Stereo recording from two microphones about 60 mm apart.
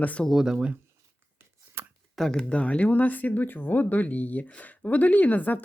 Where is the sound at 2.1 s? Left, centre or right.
Centre.